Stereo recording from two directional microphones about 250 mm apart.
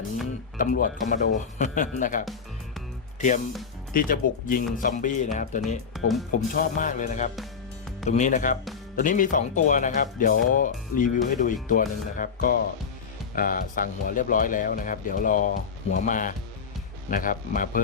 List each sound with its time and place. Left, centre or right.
0.5 s speech: left